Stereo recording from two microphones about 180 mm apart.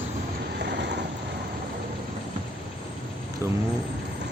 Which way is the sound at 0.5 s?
70° right (ahead or behind).